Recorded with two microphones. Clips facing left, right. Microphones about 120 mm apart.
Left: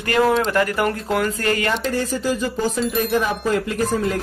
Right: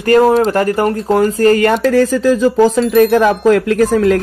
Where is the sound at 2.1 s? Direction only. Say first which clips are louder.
Right 11 dB; 90° right.